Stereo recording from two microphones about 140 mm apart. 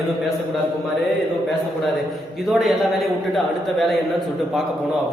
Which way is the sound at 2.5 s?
Centre (ahead or behind).